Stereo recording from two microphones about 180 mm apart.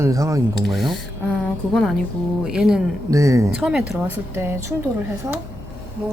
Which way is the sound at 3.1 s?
20° right (ahead or behind).